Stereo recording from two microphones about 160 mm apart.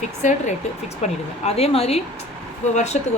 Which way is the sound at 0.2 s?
50° left (ahead or behind).